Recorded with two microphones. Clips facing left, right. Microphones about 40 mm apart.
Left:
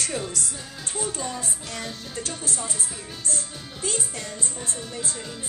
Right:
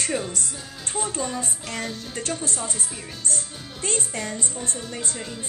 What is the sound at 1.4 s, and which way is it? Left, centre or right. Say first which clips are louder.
A woman's voice: right 3 dB; right.